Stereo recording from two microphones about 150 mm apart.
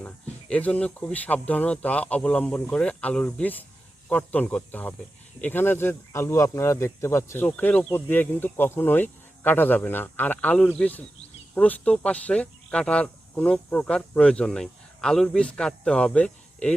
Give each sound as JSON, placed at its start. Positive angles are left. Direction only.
{"t": 0.0, "sound": "speech", "side_deg": 10}